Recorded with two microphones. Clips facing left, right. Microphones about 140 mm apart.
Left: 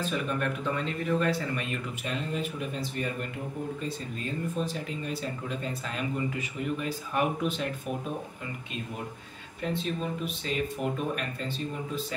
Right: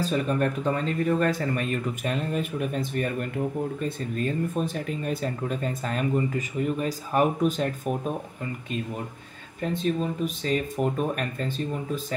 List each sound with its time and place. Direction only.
0.0 s speech: 35° right (ahead or behind)
9.6 s speech: 40° right (ahead or behind)